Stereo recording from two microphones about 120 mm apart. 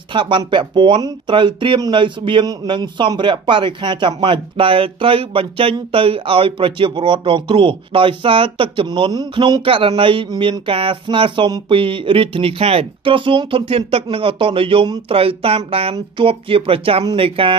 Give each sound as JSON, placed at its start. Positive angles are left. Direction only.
{"t": 0.1, "sound": "speech", "side_deg": -40}